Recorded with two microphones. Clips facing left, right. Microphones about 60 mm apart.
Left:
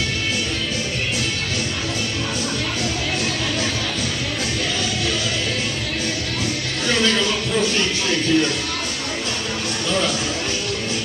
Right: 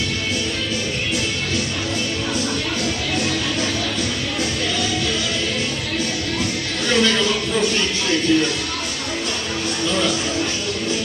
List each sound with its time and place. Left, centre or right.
8.3 s music: left